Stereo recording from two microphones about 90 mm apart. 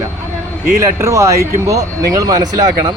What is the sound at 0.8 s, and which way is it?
Speech, 35° right (ahead or behind).